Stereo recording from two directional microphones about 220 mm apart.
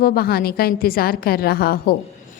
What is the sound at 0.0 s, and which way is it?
A woman's voice, 45° left (ahead or behind).